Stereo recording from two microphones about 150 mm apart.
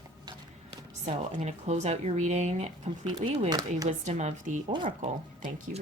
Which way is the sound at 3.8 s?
45° right (ahead or behind).